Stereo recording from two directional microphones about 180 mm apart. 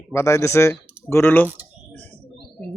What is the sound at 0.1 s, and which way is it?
Speech, 15° left (ahead or behind).